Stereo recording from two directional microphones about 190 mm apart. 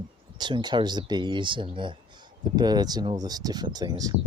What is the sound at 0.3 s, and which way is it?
Speech, 25° right (ahead or behind).